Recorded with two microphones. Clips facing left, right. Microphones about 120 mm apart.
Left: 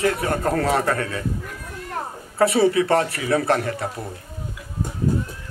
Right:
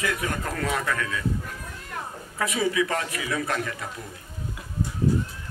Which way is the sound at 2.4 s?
35° left (ahead or behind).